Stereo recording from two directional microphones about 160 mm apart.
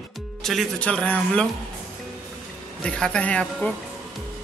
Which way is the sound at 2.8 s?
5° left (ahead or behind).